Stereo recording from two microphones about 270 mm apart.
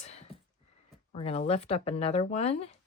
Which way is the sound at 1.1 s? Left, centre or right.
Left.